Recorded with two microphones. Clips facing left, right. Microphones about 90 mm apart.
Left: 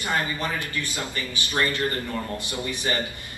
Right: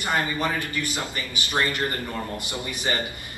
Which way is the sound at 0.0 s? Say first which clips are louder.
Right 2 dB; 20° right (ahead or behind).